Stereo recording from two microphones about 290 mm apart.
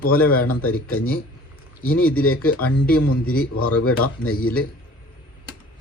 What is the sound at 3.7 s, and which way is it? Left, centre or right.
Speech, left.